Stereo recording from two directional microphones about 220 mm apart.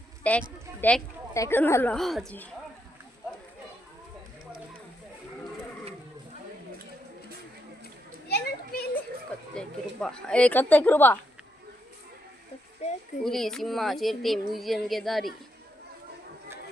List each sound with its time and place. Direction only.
0.2 s speech: 5° left (ahead or behind)
8.3 s children playing: 45° left (ahead or behind)
9.6 s speech: 5° left (ahead or behind)
12.8 s a child's voice: 30° left (ahead or behind)
13.2 s speech: centre (ahead or behind)